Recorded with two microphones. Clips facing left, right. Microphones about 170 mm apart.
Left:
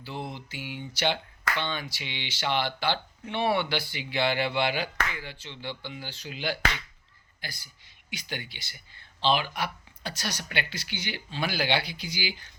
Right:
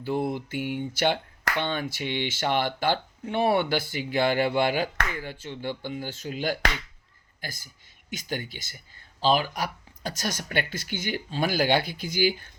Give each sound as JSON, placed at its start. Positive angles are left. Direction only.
{"t": 0.0, "sound": "speech", "side_deg": -50}